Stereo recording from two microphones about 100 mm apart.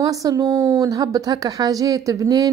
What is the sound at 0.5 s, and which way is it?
Speech, 25° right (ahead or behind).